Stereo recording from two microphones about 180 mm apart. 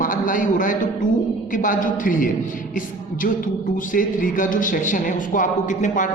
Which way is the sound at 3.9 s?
50° left (ahead or behind).